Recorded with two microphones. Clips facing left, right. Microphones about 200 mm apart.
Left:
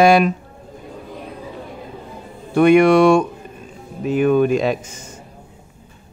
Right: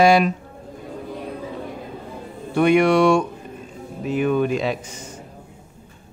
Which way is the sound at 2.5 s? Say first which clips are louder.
Left 4 dB; 55° left (ahead or behind).